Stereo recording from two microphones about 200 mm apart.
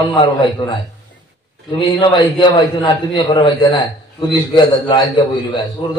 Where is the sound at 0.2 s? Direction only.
25° left (ahead or behind).